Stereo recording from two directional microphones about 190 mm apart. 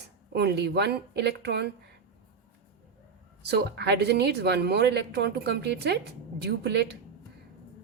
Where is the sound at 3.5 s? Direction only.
60° right (ahead or behind).